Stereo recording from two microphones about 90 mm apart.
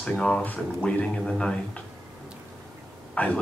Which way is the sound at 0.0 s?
10° left (ahead or behind).